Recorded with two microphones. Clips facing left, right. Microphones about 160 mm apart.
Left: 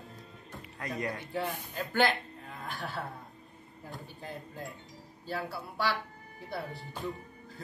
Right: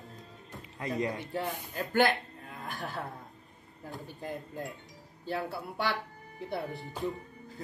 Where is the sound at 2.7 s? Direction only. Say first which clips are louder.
Right 1 dB; 40° right (ahead or behind).